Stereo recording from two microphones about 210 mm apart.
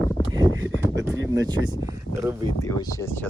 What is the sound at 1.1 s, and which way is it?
Speech, 60° right (ahead or behind).